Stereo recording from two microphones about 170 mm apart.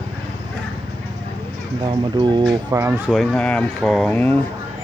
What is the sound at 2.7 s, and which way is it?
Speech, 15° right (ahead or behind).